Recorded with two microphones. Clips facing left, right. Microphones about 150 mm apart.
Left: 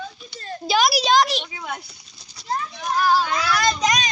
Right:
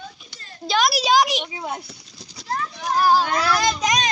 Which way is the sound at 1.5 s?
30° right (ahead or behind).